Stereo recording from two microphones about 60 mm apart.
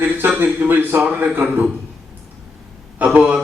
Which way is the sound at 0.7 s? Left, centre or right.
Right.